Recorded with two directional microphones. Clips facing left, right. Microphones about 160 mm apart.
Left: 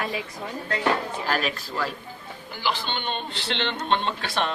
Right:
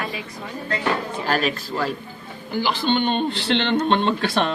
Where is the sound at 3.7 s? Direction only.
50° right (ahead or behind).